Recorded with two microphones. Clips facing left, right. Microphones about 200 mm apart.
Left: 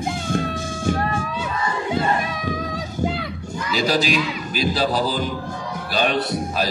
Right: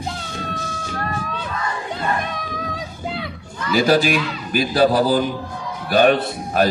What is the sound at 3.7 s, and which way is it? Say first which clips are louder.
A man's voice: right 5 dB; 50° right (ahead or behind).